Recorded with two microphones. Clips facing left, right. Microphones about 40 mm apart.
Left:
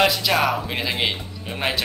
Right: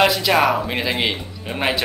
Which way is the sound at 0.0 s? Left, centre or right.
Centre.